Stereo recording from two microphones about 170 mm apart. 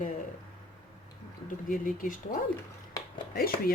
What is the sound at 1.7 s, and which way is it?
Speech, 50° left (ahead or behind).